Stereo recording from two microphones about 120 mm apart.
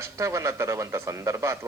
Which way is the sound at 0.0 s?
25° right (ahead or behind).